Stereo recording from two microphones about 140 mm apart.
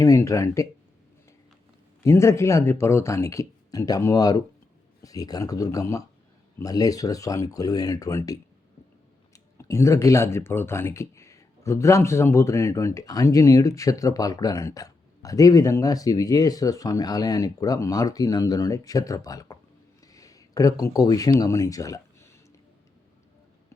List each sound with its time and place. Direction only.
0.0 s speech: 20° left (ahead or behind)
2.0 s speech: 20° left (ahead or behind)